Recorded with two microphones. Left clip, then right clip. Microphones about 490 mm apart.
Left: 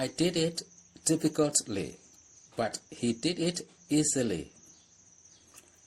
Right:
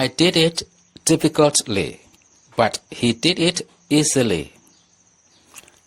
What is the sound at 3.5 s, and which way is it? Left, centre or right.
Speech, left.